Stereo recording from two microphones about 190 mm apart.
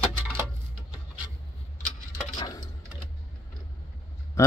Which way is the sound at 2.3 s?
20° left (ahead or behind).